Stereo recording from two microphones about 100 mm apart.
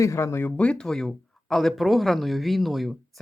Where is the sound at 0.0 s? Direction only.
30° left (ahead or behind).